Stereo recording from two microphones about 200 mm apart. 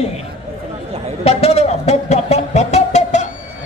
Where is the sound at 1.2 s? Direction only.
30° left (ahead or behind).